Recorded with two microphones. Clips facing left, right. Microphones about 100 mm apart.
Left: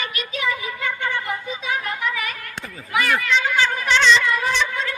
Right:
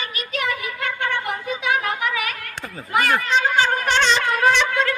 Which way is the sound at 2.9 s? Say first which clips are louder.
Right 2 dB; 45° right (ahead or behind).